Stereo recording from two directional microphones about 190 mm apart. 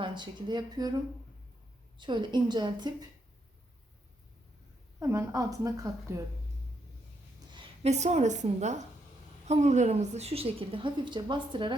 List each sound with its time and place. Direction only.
0.0 s speech: 25° right (ahead or behind)
2.0 s speech: 25° right (ahead or behind)
4.9 s a woman's voice: 15° right (ahead or behind)
7.5 s a woman's voice: 30° right (ahead or behind)